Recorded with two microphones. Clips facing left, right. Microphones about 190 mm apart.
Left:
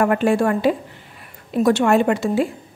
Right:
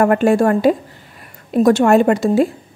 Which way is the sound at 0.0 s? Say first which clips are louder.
Right 4 dB; 45° right (ahead or behind).